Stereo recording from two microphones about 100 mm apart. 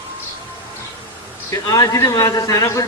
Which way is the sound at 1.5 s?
35° left (ahead or behind).